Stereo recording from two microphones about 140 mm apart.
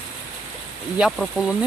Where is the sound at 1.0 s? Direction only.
Centre (ahead or behind).